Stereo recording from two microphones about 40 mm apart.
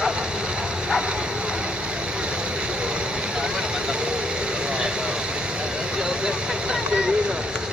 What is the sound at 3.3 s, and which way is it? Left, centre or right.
Vehicle, right.